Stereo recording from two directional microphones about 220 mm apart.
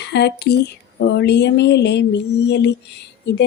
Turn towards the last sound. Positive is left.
turn(degrees=50)  # may be behind; listen again after turning